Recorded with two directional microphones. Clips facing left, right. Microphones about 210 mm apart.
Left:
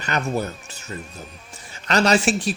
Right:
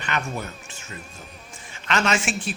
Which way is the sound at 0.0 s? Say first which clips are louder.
Left 5 dB; 40° left (ahead or behind).